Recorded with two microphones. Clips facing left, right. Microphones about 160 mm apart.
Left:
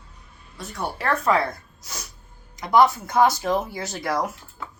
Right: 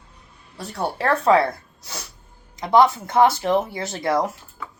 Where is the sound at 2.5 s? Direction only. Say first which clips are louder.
Right 2 dB; 30° right (ahead or behind).